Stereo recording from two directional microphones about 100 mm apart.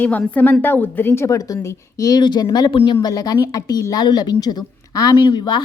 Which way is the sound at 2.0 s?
40° left (ahead or behind).